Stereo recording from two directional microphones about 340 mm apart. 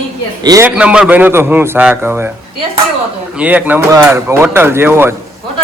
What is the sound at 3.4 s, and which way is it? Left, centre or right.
Speech, centre.